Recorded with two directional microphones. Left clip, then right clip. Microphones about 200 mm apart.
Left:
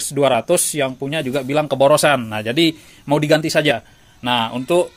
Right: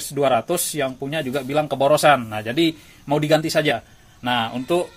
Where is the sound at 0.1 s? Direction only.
45° left (ahead or behind).